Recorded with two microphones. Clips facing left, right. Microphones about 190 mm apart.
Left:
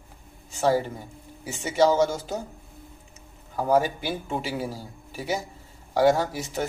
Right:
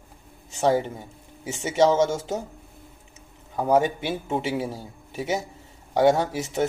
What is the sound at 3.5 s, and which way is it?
A man's voice, 20° right (ahead or behind).